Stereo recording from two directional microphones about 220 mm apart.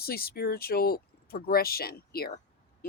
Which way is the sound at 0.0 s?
45° left (ahead or behind).